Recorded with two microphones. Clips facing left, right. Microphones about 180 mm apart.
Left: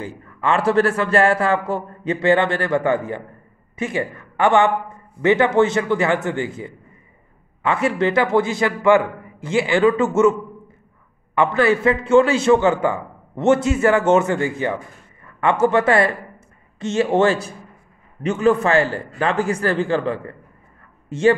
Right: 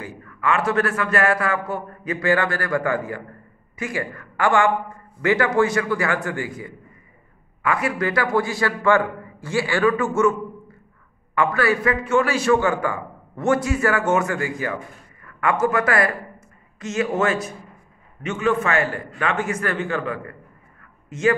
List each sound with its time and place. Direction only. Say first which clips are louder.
0.0 s a man's voice: left 2 dB; 25° left (ahead or behind)
11.3 s a man's voice: left 3 dB; 25° left (ahead or behind)